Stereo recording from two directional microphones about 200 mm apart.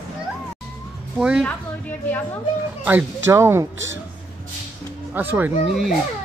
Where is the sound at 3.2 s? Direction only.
10° right (ahead or behind).